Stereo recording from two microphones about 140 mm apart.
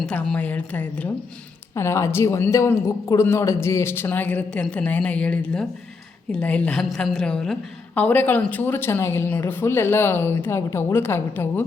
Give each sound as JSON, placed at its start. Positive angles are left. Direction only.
{"t": 0.0, "sound": "a woman's voice", "side_deg": 5}